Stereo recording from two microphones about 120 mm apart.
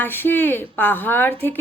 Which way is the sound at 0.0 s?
15° left (ahead or behind).